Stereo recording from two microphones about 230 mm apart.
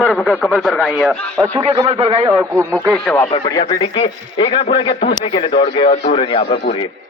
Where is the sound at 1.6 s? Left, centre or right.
Right.